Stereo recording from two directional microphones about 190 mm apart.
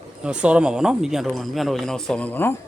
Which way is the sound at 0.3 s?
5° right (ahead or behind).